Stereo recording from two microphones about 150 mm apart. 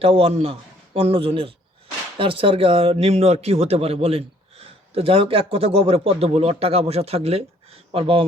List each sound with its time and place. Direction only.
0.0 s speech: 40° right (ahead or behind)